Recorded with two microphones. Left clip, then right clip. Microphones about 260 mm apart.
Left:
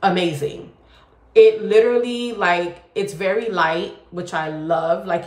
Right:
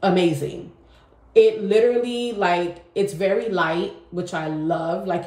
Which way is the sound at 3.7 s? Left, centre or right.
Centre.